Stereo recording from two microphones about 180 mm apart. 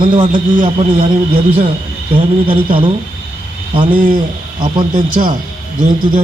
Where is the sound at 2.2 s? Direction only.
30° right (ahead or behind).